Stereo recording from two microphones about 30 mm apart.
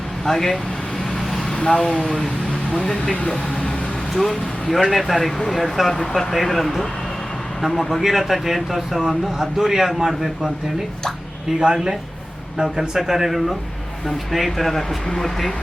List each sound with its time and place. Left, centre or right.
0.3 s speech: centre
1.5 s speech: left
4.1 s speech: centre
11.6 s a man's voice: right
14.3 s speech: centre